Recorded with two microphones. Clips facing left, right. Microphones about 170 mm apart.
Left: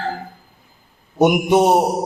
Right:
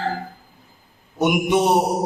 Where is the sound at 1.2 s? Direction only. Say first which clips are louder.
Left 4 dB; 45° left (ahead or behind).